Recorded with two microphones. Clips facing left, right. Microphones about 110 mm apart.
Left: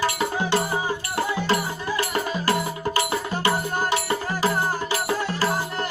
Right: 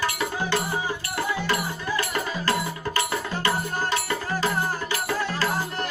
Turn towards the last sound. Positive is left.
turn(degrees=20)  # may be behind; listen again after turning